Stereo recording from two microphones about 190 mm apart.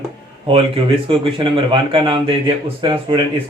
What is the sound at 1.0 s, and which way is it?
Speech, 30° right (ahead or behind).